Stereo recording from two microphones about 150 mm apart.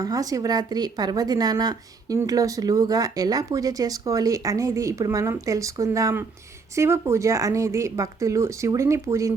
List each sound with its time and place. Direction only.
0.0 s a woman's voice: 25° right (ahead or behind)